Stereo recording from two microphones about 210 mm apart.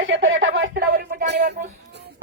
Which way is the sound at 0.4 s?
65° right (ahead or behind).